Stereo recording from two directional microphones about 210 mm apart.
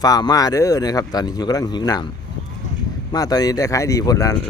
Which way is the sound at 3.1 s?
20° left (ahead or behind).